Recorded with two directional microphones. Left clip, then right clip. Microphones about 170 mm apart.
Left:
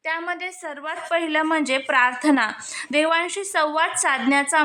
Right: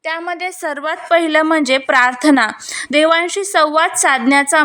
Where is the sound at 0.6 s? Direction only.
40° right (ahead or behind).